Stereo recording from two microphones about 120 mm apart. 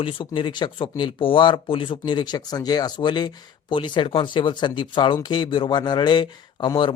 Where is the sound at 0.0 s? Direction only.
45° left (ahead or behind).